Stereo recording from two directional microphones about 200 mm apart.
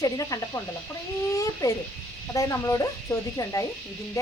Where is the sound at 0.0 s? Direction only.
15° left (ahead or behind).